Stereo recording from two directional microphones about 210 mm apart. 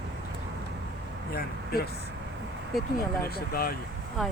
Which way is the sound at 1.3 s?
45° left (ahead or behind).